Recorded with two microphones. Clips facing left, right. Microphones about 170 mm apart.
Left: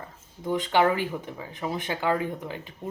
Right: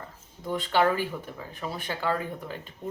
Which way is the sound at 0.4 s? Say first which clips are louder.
Left 2 dB; 20° left (ahead or behind).